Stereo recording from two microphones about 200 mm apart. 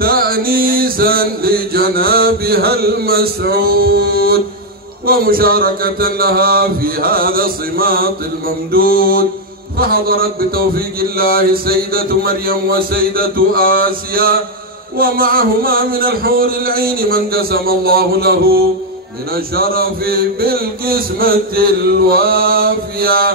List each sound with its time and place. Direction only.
0.0 s a man's voice: 50° right (ahead or behind)